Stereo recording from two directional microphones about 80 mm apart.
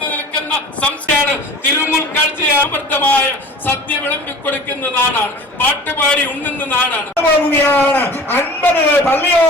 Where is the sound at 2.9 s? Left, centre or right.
Left.